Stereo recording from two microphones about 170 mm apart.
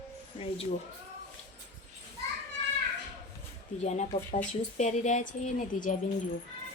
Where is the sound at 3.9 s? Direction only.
45° left (ahead or behind).